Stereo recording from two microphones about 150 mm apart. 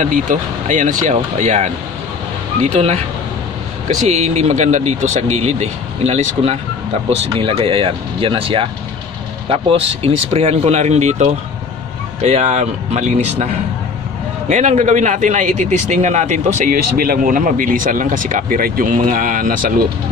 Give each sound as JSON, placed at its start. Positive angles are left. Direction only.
{"t": 0.0, "sound": "a man's voice", "side_deg": -60}
{"t": 14.5, "sound": "a man's voice", "side_deg": -50}